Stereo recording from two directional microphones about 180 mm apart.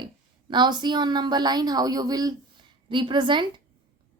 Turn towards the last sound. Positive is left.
turn(degrees=-25)  # may be behind; listen again after turning